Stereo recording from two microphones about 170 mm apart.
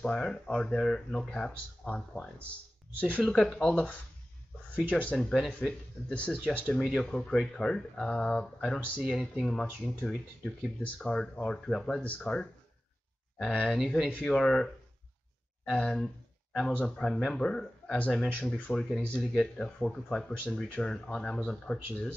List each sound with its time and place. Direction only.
0.0 s speech: 5° left (ahead or behind)
8.8 s speech: 5° right (ahead or behind)